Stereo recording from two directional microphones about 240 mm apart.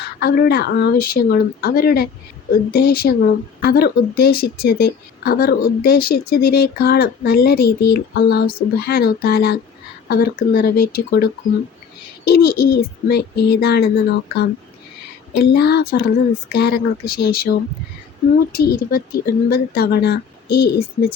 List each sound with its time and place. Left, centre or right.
0.2 s speech: left